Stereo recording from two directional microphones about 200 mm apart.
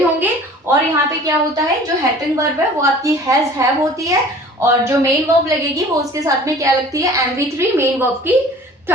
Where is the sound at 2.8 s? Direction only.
15° right (ahead or behind).